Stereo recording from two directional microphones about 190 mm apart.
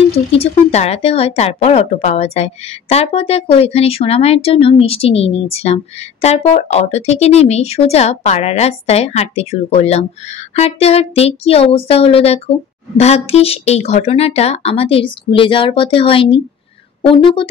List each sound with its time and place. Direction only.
0.1 s a woman's voice: 30° left (ahead or behind)